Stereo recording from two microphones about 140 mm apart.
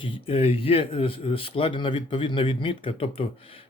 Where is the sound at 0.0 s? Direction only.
40° left (ahead or behind).